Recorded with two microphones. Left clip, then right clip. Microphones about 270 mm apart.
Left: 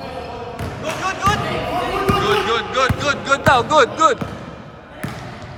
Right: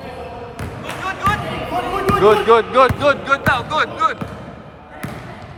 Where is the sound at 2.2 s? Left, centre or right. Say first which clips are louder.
Right 6 dB; right; by 4.1 s centre.